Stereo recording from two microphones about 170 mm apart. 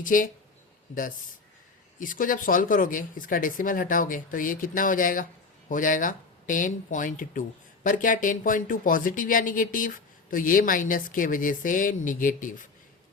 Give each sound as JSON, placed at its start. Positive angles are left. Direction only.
{"t": 0.0, "sound": "speech", "side_deg": 50}
{"t": 2.0, "sound": "speech", "side_deg": 55}